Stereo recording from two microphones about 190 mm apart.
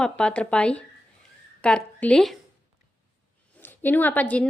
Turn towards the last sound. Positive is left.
turn(degrees=10)  # may be behind; listen again after turning